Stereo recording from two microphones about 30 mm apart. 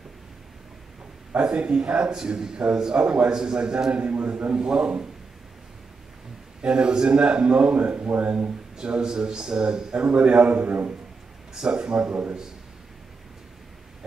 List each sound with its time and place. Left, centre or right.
1.3 s a man's voice: right
2.1 s a man's voice: right
3.9 s a man's voice: right
4.6 s speech: right
6.6 s a man's voice: right
8.2 s a man's voice: right
8.8 s a man's voice: right
9.1 s speech: right
10.0 s a man's voice: right
10.5 s a man's voice: right
11.7 s a man's voice: right
12.1 s a man's voice: right